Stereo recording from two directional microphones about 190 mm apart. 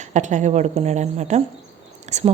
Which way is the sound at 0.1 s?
40° right (ahead or behind).